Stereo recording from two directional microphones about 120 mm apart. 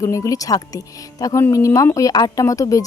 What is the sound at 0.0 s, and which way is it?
A woman's voice, 25° left (ahead or behind).